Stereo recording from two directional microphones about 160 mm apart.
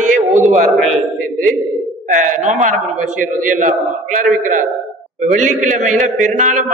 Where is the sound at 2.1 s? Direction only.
55° right (ahead or behind).